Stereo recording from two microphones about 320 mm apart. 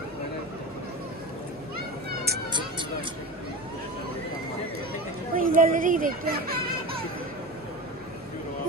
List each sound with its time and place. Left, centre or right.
2.0 s music: right
5.3 s speech: right